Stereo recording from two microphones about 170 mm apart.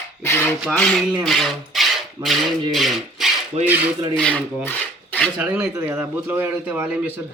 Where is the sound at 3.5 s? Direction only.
40° right (ahead or behind).